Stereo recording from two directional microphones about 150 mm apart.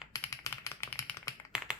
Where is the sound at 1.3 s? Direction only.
20° left (ahead or behind).